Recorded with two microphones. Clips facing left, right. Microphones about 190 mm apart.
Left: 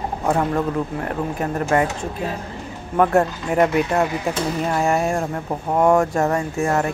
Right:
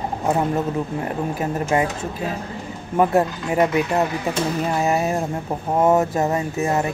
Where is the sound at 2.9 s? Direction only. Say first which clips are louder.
Left 1 dB; 10° right (ahead or behind).